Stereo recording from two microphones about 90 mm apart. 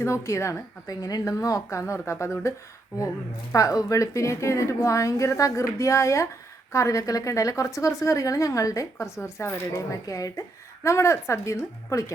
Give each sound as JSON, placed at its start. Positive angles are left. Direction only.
{"t": 0.0, "sound": "a woman's voice", "side_deg": 35}
{"t": 3.5, "sound": "a woman's voice", "side_deg": 40}